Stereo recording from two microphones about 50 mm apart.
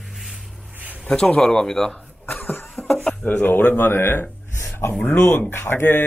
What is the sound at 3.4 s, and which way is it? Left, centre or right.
Speech, left.